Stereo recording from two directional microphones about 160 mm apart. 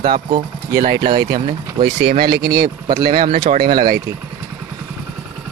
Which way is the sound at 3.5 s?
70° right (ahead or behind).